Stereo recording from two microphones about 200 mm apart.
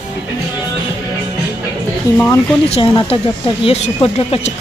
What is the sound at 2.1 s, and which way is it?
Speech, 10° left (ahead or behind).